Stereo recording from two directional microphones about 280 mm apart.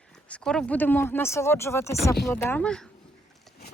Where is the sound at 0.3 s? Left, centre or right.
Centre.